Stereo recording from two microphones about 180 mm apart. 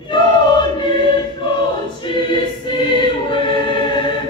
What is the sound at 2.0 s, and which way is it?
Choir, 25° left (ahead or behind).